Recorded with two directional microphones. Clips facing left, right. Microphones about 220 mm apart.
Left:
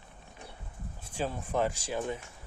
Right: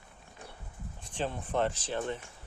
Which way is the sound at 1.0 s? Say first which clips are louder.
Left 1 dB; 5° left (ahead or behind).